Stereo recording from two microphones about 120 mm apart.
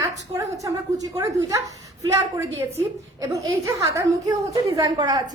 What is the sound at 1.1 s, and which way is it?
A woman's voice, 30° right (ahead or behind).